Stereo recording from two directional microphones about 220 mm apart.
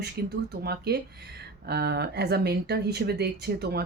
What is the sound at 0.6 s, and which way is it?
Speech, 45° right (ahead or behind).